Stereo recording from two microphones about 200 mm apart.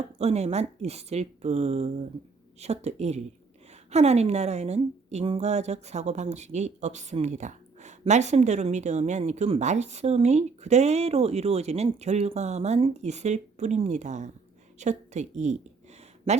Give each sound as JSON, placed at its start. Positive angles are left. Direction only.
{"t": 0.2, "sound": "a woman's voice", "side_deg": -30}